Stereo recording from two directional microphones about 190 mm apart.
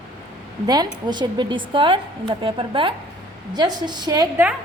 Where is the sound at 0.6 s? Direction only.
20° right (ahead or behind).